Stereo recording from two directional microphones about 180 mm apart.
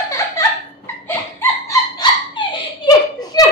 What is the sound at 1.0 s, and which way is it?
Laughter, 15° left (ahead or behind).